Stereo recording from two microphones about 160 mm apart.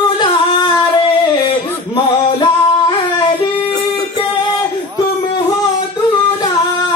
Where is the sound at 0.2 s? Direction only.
30° left (ahead or behind).